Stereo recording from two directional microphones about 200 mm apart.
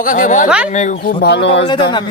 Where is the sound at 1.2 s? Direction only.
55° left (ahead or behind).